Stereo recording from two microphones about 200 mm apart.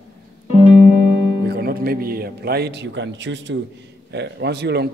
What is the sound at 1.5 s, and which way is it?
A man's voice, 50° right (ahead or behind).